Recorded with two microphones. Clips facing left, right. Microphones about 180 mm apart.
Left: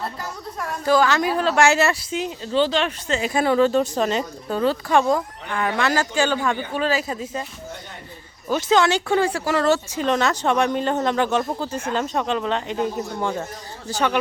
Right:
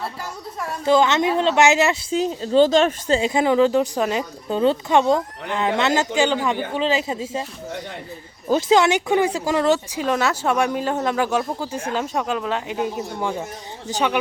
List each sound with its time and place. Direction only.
0.9 s speech: 20° right (ahead or behind)
2.0 s speech: 35° right (ahead or behind)
3.2 s speech: 20° right (ahead or behind)
8.5 s speech: 20° right (ahead or behind)